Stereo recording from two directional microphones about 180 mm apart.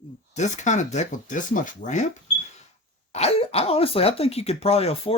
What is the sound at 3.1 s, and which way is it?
Speech, 35° left (ahead or behind).